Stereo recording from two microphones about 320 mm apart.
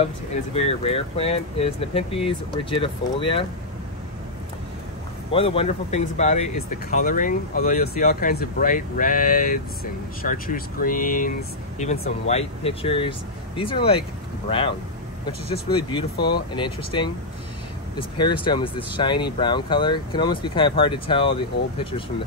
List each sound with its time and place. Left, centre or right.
0.6 s speech: centre
5.3 s speech: centre
15.4 s speech: centre